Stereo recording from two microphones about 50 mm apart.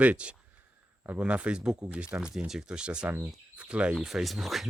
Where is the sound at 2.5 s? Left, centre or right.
Centre.